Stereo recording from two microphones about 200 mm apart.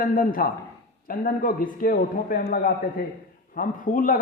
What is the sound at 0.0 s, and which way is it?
A man's voice, 45° left (ahead or behind).